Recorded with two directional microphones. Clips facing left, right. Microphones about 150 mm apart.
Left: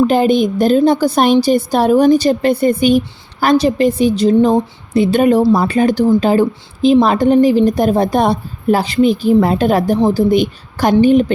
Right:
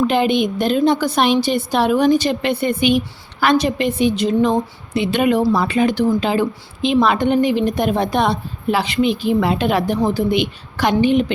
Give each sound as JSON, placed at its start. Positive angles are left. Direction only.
{"t": 0.1, "sound": "a woman's voice", "side_deg": 40}